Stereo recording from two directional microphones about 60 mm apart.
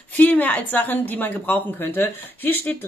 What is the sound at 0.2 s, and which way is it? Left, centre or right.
A woman's voice, left.